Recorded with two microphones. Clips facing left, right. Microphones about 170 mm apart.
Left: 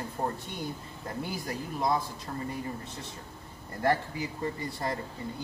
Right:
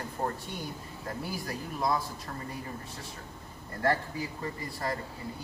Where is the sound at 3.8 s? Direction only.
20° left (ahead or behind).